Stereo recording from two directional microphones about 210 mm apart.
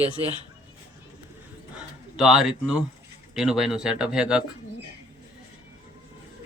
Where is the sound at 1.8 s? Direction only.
5° right (ahead or behind).